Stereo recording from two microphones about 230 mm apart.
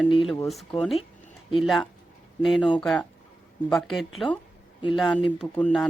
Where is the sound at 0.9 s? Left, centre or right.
Left.